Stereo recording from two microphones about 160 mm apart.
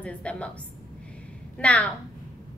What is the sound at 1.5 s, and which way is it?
Speech, 5° left (ahead or behind).